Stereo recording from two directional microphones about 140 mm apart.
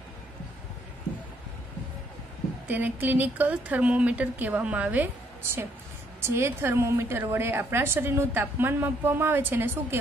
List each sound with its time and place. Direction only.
2.7 s a woman's voice: 10° right (ahead or behind)